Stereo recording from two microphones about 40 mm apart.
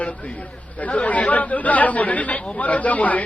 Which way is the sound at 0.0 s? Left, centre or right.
Left.